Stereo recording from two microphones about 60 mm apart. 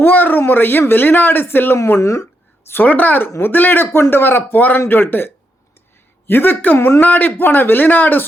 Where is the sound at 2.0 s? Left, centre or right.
Left.